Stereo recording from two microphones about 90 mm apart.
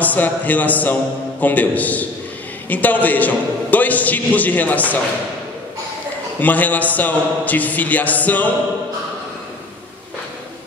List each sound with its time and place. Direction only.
0.0 s a man's voice: 20° left (ahead or behind)
6.4 s a man's voice: 20° left (ahead or behind)